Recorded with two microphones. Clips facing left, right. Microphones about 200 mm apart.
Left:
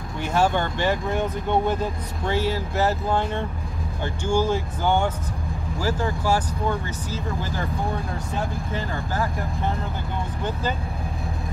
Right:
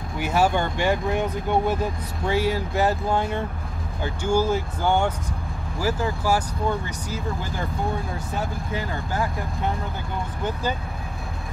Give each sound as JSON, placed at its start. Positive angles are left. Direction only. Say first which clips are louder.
{"t": 0.2, "sound": "speech", "louder": "even", "side_deg": -10}
{"t": 8.7, "sound": "speech", "louder": "right 1 dB", "side_deg": -15}